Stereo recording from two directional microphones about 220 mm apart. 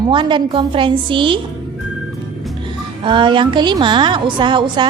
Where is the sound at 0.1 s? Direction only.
20° right (ahead or behind).